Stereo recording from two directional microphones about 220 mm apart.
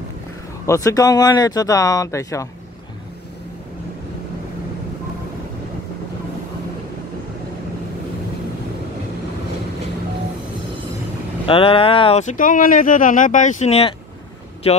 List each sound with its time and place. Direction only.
0.7 s speech: 15° left (ahead or behind)
11.4 s speech: 25° left (ahead or behind)